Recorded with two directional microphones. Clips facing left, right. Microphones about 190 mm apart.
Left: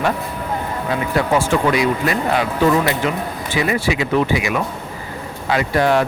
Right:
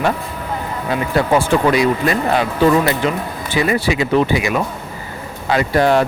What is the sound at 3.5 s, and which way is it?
Speech, 35° right (ahead or behind).